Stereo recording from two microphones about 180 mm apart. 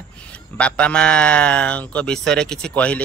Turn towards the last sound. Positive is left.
turn(degrees=5)  # may be behind; listen again after turning